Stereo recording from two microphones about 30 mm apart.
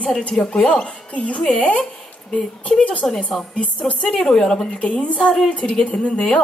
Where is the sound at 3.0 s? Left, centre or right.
Left.